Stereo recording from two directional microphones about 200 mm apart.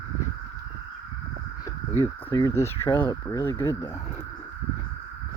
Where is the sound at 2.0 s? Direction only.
15° left (ahead or behind).